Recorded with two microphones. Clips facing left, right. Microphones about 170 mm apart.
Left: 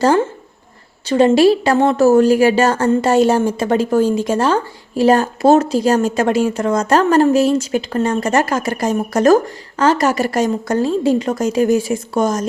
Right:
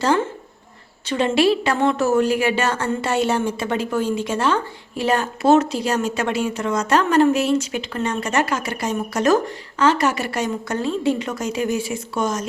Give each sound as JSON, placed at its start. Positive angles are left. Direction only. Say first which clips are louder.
{"t": 1.0, "sound": "a woman's voice", "louder": "left 7 dB", "side_deg": 40}